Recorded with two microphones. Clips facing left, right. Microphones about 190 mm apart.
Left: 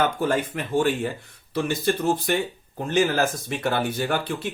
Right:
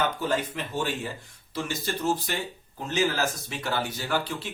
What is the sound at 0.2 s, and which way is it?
Speech, 50° left (ahead or behind).